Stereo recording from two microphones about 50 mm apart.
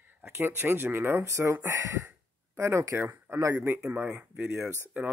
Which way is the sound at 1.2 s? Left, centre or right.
Right.